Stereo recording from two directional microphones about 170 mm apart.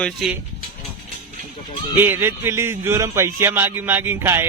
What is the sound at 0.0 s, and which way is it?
Speech, centre (ahead or behind).